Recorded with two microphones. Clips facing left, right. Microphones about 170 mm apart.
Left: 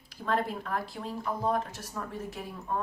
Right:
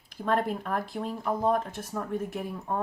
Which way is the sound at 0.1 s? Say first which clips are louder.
Right 3 dB; 50° right (ahead or behind).